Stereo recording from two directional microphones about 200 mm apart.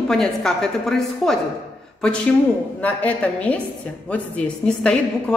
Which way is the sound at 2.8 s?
5° left (ahead or behind).